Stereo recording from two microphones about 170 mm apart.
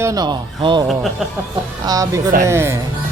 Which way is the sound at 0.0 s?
20° right (ahead or behind).